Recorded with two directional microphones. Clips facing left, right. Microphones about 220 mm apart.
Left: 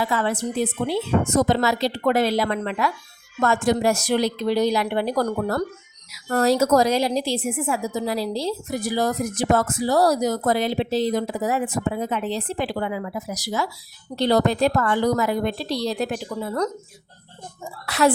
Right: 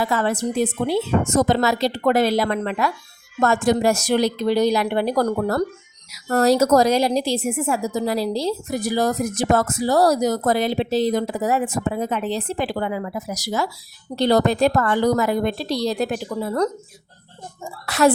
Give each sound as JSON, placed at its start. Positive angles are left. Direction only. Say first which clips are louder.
{"t": 0.1, "sound": "a woman's voice", "louder": "right 2 dB", "side_deg": -45}
{"t": 17.8, "sound": "a woman's voice", "louder": "right 2 dB", "side_deg": -45}